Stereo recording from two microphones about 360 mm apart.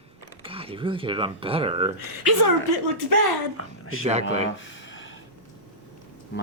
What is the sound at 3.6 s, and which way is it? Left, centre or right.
Speech, left.